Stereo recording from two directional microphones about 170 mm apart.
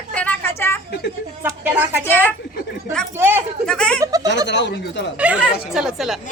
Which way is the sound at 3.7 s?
5° left (ahead or behind).